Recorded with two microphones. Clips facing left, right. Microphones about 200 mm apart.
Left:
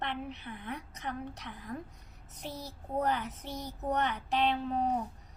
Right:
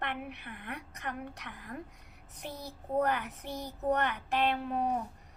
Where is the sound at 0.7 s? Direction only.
10° right (ahead or behind).